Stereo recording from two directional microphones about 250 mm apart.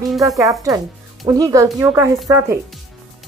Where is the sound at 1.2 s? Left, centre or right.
Centre.